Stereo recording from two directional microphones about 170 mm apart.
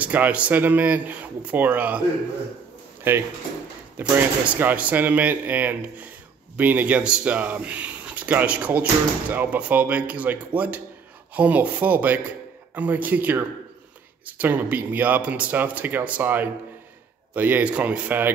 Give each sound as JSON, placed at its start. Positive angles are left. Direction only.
{"t": 0.0, "sound": "speech", "side_deg": -10}